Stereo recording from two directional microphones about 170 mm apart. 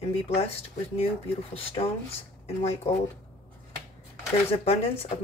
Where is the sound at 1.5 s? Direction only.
35° left (ahead or behind).